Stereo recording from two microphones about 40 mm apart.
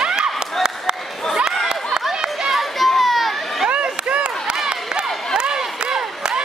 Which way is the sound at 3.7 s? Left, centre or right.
Right.